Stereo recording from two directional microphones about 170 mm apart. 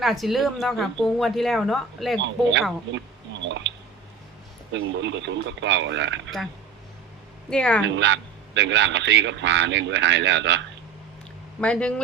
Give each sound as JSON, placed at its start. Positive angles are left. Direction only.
{"t": 0.0, "sound": "a woman's voice", "side_deg": 0}
{"t": 2.2, "sound": "a man's voice", "side_deg": -90}
{"t": 4.7, "sound": "a man's voice", "side_deg": -90}
{"t": 7.5, "sound": "a woman's voice", "side_deg": 5}
{"t": 7.9, "sound": "a man's voice", "side_deg": -90}
{"t": 11.6, "sound": "a woman's voice", "side_deg": 5}